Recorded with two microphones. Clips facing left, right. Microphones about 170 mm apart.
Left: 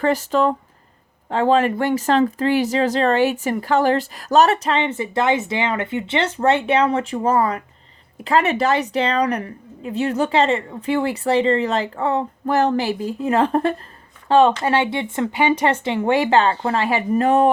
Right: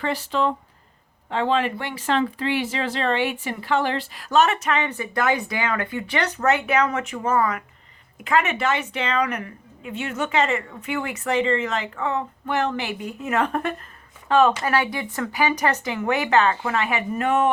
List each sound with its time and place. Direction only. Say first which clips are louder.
0.0 s speech: left 6 dB; 45° left (ahead or behind)